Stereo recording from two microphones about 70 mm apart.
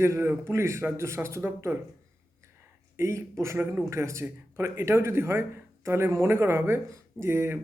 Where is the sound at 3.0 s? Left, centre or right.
Right.